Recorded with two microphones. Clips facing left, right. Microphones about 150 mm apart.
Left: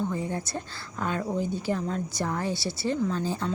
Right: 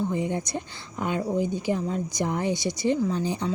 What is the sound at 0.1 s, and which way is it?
Speech, 20° right (ahead or behind).